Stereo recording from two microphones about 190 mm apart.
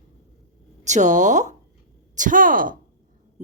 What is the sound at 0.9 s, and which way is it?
A woman's voice, 40° right (ahead or behind).